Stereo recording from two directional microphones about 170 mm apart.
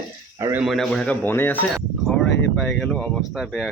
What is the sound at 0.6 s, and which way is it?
Speech, centre (ahead or behind).